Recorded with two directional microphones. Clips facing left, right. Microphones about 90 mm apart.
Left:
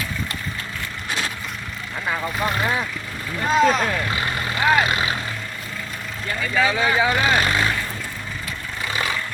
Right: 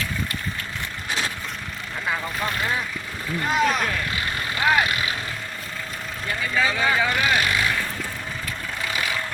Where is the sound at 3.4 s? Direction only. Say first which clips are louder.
Left 4 dB; 20° left (ahead or behind).